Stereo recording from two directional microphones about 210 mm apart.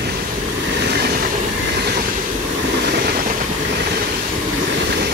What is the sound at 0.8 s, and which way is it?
Train, 50° right (ahead or behind).